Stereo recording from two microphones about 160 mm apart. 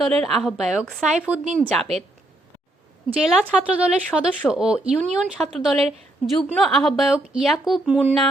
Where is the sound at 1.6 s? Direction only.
5° left (ahead or behind).